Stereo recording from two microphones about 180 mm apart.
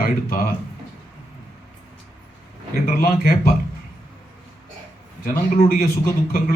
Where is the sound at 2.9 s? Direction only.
55° left (ahead or behind).